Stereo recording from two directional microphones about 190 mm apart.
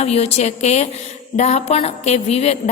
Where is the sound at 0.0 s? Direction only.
35° left (ahead or behind).